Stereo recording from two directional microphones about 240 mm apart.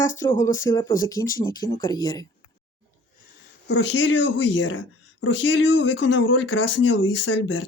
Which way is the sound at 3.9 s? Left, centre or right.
Left.